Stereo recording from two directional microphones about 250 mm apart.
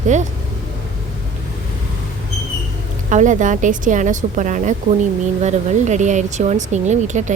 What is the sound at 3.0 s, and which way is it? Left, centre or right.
Speech, right.